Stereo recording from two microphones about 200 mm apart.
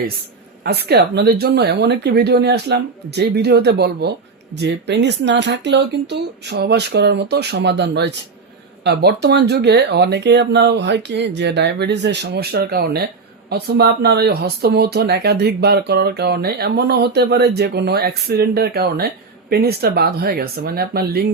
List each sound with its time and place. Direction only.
0.6 s speech: 50° right (ahead or behind)